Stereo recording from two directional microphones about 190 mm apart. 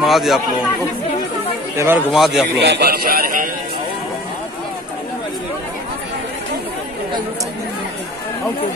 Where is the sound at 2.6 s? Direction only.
60° right (ahead or behind).